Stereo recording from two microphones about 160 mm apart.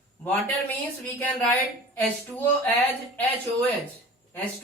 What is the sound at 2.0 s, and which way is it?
Speech, 10° left (ahead or behind).